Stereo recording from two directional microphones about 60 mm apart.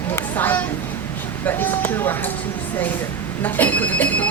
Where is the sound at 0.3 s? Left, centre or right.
Left.